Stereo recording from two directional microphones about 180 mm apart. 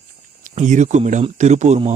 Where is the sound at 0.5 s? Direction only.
40° right (ahead or behind).